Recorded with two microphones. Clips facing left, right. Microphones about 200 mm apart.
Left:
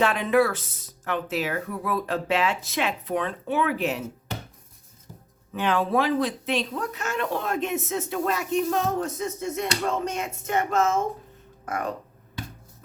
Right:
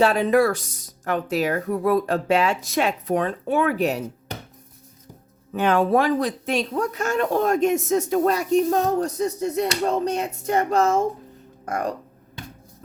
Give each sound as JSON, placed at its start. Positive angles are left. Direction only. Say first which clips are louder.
{"t": 0.0, "sound": "speech", "louder": "right 4 dB", "side_deg": -40}
{"t": 5.5, "sound": "speech", "louder": "right 5 dB", "side_deg": -45}